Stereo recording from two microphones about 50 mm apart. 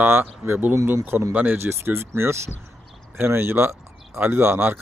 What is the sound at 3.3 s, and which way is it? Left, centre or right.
Speech, right.